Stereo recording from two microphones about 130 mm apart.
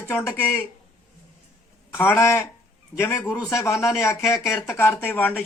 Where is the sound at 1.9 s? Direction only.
15° left (ahead or behind).